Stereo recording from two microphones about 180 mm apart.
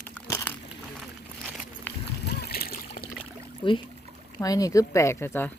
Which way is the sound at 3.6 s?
30° left (ahead or behind).